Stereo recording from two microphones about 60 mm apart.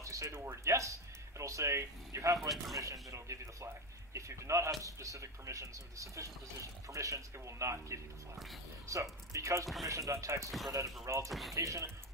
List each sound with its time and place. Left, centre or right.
0.0 s a sound: right
0.4 s a man's voice: right
2.4 s speech: centre
2.8 s a man's voice: right
11.2 s speech: centre
11.5 s a man's voice: right